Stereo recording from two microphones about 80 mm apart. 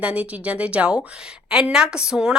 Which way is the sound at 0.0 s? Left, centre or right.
Centre.